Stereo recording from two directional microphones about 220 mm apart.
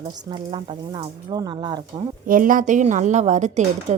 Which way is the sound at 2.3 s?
40° right (ahead or behind).